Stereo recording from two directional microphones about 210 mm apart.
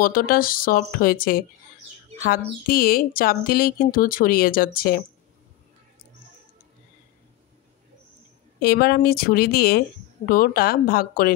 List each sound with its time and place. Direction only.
0.0 s speech: 45° left (ahead or behind)
2.7 s speech: 45° left (ahead or behind)
8.5 s speech: 45° left (ahead or behind)